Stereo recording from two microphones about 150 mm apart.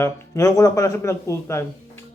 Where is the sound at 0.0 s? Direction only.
20° left (ahead or behind).